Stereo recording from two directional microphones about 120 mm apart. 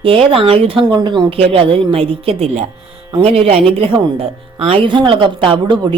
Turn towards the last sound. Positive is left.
turn(degrees=-40)  # may be behind; listen again after turning